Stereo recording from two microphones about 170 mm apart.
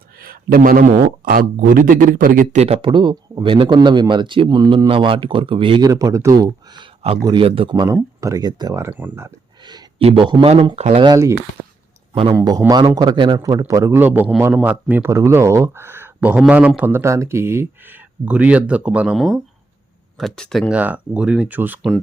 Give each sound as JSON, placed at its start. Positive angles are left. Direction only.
{"t": 0.2, "sound": "speech", "side_deg": -60}
{"t": 10.0, "sound": "speech", "side_deg": -30}
{"t": 11.0, "sound": "speech", "side_deg": -20}
{"t": 11.6, "sound": "a sound", "side_deg": -10}
{"t": 12.1, "sound": "speech", "side_deg": -30}
{"t": 12.4, "sound": "a man's voice", "side_deg": -20}